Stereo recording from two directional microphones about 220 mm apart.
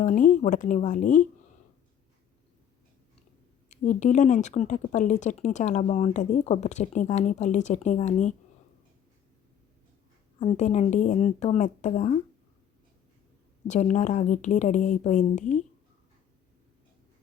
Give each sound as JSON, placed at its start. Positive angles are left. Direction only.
{"t": 0.0, "sound": "speech", "side_deg": 35}
{"t": 3.7, "sound": "speech", "side_deg": 35}
{"t": 10.4, "sound": "speech", "side_deg": 30}
{"t": 13.7, "sound": "speech", "side_deg": 35}